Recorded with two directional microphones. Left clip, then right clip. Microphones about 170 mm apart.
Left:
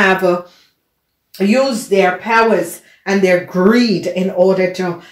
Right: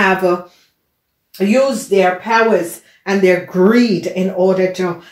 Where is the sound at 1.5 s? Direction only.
5° left (ahead or behind).